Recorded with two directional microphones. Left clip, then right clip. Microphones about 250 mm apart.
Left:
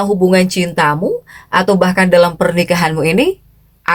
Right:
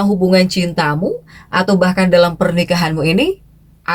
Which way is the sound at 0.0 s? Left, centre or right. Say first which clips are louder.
Left 2 dB; left.